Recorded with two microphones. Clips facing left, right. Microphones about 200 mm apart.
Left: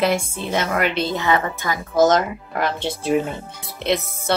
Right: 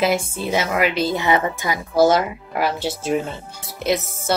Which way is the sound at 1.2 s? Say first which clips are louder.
Right 1 dB; 15° right (ahead or behind).